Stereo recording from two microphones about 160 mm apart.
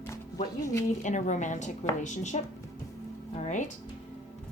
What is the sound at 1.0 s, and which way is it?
Speech, 50° left (ahead or behind).